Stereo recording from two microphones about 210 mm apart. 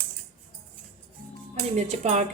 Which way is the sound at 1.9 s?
30° right (ahead or behind).